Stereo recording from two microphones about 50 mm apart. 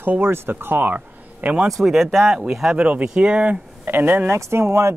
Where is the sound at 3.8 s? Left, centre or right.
Right.